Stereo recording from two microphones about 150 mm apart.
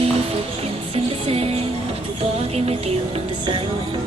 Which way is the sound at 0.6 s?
40° right (ahead or behind).